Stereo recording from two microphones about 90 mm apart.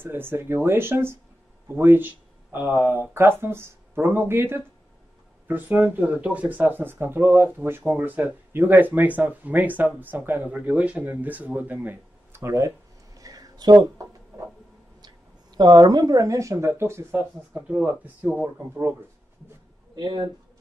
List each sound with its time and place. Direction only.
0.0 s speech: 25° right (ahead or behind)
12.4 s a sound: 35° right (ahead or behind)
15.5 s speech: 50° right (ahead or behind); by 17.6 s 25° right (ahead or behind)
17.6 s speech: 15° right (ahead or behind)
20.0 s speech: 55° right (ahead or behind)